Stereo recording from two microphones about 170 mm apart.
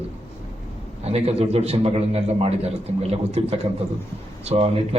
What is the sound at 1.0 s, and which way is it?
A man's voice, 40° right (ahead or behind).